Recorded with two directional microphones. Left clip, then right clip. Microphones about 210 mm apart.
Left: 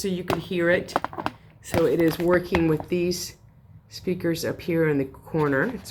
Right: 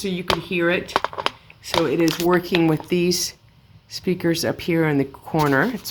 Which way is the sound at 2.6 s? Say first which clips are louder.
Right 4 dB; 45° right (ahead or behind).